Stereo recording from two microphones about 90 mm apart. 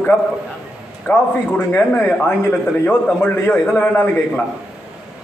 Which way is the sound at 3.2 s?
15° left (ahead or behind).